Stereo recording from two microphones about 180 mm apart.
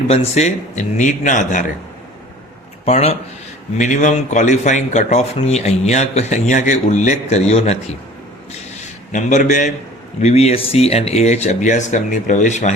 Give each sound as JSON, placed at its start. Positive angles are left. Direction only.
{"t": 0.1, "sound": "a man's voice", "side_deg": 35}
{"t": 2.8, "sound": "a man's voice", "side_deg": 35}